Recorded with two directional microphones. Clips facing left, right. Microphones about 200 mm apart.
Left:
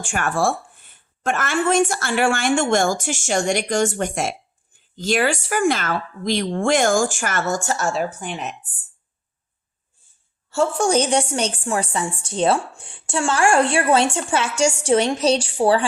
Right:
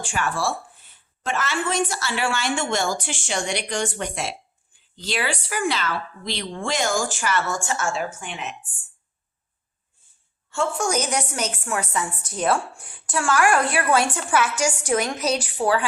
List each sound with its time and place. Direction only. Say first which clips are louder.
0.0 s a woman's voice: left 4 dB; 50° left (ahead or behind)
10.5 s a woman's voice: left 5 dB; 35° left (ahead or behind)